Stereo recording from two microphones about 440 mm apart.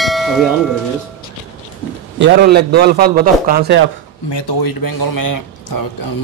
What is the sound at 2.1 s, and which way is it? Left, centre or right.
A man's voice, right.